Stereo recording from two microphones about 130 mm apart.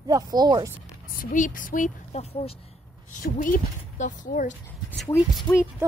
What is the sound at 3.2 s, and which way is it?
A woman's voice, 90° left.